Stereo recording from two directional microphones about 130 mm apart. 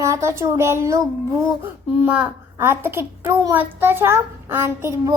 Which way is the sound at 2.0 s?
10° right (ahead or behind).